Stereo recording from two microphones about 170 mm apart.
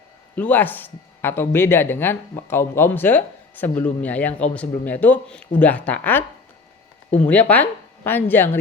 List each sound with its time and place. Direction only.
0.3 s speech: 10° left (ahead or behind)
7.3 s speech: 10° left (ahead or behind)